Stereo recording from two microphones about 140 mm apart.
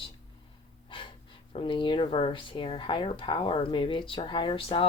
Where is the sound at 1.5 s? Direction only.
40° left (ahead or behind).